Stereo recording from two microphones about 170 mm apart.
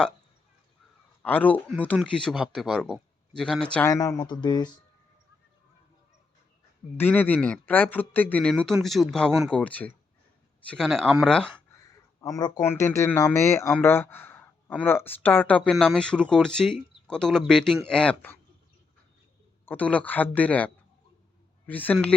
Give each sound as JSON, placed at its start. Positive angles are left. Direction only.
{"t": 1.2, "sound": "a man's voice", "side_deg": 10}
{"t": 3.8, "sound": "speech", "side_deg": 20}
{"t": 6.9, "sound": "a man's voice", "side_deg": 10}
{"t": 12.2, "sound": "a man's voice", "side_deg": 20}
{"t": 19.6, "sound": "speech", "side_deg": 10}